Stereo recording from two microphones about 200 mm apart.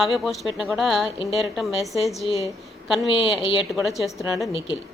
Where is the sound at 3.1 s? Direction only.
25° left (ahead or behind).